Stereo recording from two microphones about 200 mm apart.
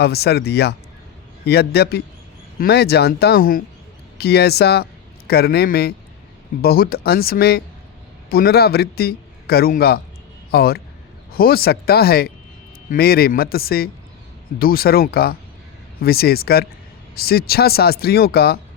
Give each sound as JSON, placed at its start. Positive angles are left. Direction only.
{"t": 0.0, "sound": "a man's voice", "side_deg": 55}